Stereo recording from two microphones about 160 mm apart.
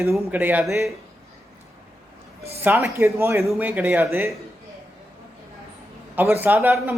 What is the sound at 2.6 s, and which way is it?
Speech, 15° right (ahead or behind).